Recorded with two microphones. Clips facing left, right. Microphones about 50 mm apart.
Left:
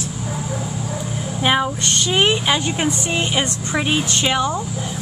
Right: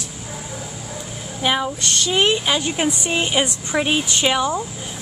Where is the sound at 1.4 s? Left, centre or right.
Centre.